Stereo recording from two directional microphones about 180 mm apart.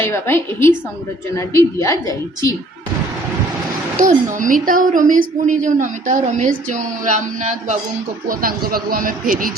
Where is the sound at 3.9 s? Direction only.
45° right (ahead or behind).